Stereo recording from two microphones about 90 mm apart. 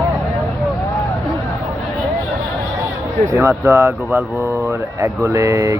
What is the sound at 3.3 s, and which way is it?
Speech, 20° right (ahead or behind).